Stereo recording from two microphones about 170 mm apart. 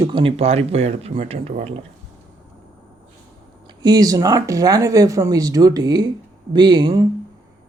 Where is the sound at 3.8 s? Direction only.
25° right (ahead or behind).